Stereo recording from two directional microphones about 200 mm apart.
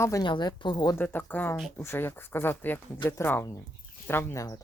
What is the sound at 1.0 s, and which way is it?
Speech, 10° left (ahead or behind).